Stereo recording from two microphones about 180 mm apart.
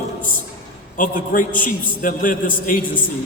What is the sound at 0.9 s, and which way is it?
A man's voice, 50° left (ahead or behind).